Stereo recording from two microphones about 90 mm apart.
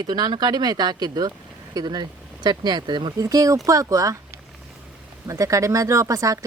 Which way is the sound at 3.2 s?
40° right (ahead or behind).